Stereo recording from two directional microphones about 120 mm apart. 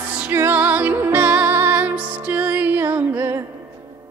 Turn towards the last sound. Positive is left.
turn(degrees=-15)  # may be behind; listen again after turning